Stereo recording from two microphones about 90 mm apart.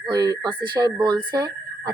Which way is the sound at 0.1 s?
45° right (ahead or behind).